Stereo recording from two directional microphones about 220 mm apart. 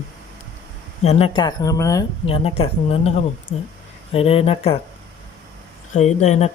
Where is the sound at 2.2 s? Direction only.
25° left (ahead or behind).